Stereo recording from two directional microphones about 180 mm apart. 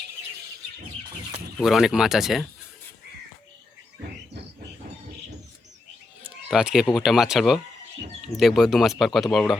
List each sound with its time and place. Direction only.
1.5 s speech: centre (ahead or behind)
6.2 s a sound: 5° right (ahead or behind)
6.9 s speech: centre (ahead or behind)